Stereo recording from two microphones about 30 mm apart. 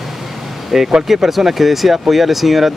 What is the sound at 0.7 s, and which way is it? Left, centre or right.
Speech, centre.